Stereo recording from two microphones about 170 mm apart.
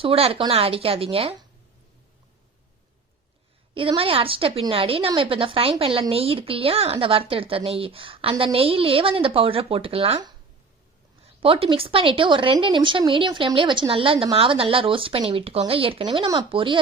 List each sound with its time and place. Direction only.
0.0 s a woman's voice: 35° right (ahead or behind)
3.8 s a woman's voice: 30° right (ahead or behind)
11.3 s a woman's voice: 30° right (ahead or behind)